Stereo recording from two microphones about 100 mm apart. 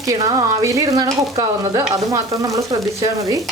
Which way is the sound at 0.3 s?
35° right (ahead or behind).